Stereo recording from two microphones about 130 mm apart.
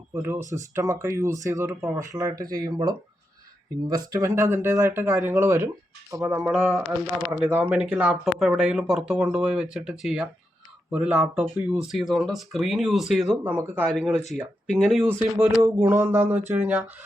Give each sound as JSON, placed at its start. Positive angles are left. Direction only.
{"t": 0.1, "sound": "speech", "side_deg": -20}
{"t": 6.4, "sound": "speech", "side_deg": -5}
{"t": 8.1, "sound": "speech", "side_deg": 0}
{"t": 13.4, "sound": "speech", "side_deg": -15}